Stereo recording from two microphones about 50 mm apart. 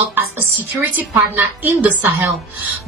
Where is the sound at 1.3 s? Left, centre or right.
Right.